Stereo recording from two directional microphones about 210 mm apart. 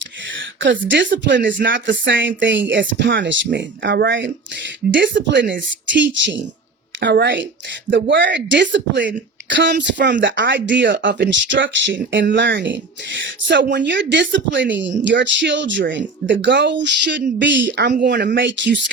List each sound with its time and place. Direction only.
0.3 s a sound: 60° right (ahead or behind)
1.4 s speech: 40° right (ahead or behind)
1.6 s speech: 60° right (ahead or behind)